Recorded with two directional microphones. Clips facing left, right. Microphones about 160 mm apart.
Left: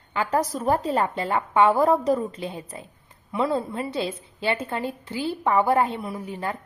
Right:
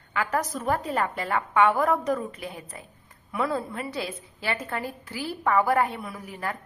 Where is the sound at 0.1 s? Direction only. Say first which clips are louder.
Left 3 dB; 30° left (ahead or behind).